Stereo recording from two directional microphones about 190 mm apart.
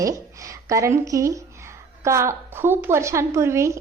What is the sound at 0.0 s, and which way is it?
A woman's voice, 15° right (ahead or behind).